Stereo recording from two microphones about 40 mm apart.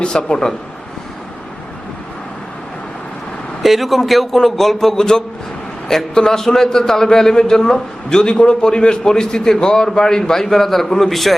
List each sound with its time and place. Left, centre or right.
0.0 s speech: left
3.6 s a man's voice: centre